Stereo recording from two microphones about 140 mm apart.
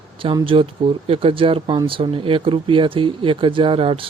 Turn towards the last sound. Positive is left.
turn(degrees=-40)  # may be behind; listen again after turning